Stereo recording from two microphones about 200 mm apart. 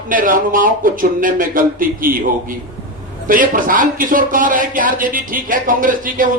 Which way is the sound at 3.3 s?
45° right (ahead or behind).